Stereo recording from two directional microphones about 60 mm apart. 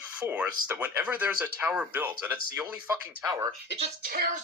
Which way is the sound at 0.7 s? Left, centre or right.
Right.